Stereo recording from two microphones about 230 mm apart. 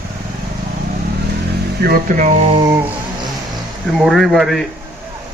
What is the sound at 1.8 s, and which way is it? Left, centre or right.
Speech, right.